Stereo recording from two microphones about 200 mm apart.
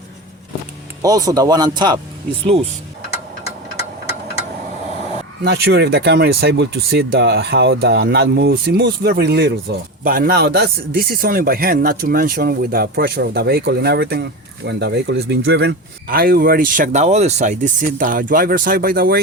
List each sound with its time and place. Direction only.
1.0 s speech: 20° right (ahead or behind)
5.4 s speech: 55° right (ahead or behind)
16.0 s speech: 45° right (ahead or behind)